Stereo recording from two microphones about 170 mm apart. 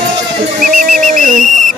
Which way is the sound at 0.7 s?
50° right (ahead or behind).